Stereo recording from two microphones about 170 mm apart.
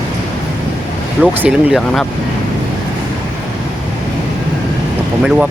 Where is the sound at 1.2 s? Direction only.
5° right (ahead or behind).